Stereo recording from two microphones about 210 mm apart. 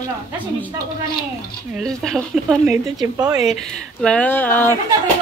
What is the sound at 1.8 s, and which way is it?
Speech, centre (ahead or behind).